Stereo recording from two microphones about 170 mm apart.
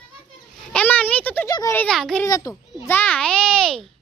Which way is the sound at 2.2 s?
20° left (ahead or behind).